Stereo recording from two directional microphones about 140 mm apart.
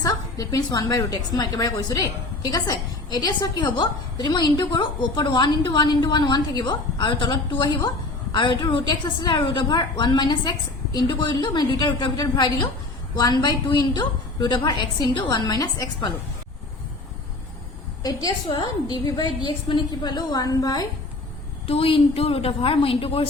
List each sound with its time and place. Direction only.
0.0 s a woman's voice: 25° left (ahead or behind)
18.0 s a woman's voice: 25° left (ahead or behind)
21.7 s a woman's voice: 40° left (ahead or behind)